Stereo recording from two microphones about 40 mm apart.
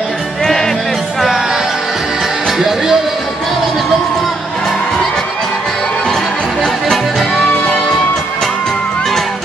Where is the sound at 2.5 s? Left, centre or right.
Centre.